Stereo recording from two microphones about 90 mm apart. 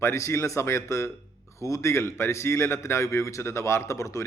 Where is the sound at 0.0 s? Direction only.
35° left (ahead or behind).